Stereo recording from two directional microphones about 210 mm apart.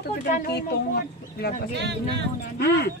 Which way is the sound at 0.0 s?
45° left (ahead or behind).